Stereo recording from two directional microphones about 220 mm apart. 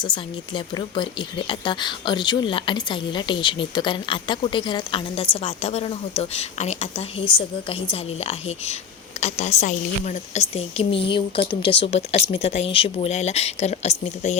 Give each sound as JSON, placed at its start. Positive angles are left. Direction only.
{"t": 0.0, "sound": "speech", "side_deg": 20}